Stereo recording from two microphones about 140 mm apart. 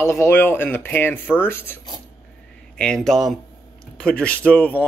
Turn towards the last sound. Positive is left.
turn(degrees=10)  # may be behind; listen again after turning